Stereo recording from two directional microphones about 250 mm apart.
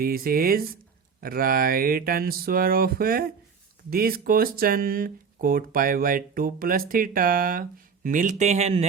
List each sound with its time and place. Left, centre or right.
0.0 s speech: right